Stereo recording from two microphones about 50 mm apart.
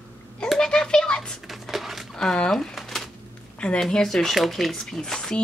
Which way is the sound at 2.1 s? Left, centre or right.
Centre.